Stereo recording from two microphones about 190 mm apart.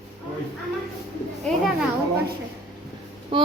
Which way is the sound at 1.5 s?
5° left (ahead or behind).